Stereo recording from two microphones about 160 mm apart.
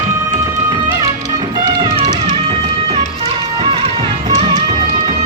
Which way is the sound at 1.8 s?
30° right (ahead or behind).